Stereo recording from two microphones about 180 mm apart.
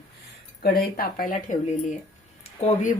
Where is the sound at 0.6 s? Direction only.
60° left (ahead or behind).